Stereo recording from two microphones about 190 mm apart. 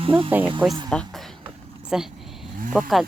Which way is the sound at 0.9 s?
5° left (ahead or behind).